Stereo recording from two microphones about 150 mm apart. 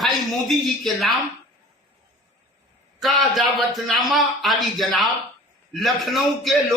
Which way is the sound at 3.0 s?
Centre (ahead or behind).